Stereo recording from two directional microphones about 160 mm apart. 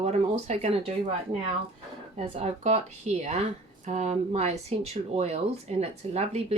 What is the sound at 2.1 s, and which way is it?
Speech, 45° right (ahead or behind).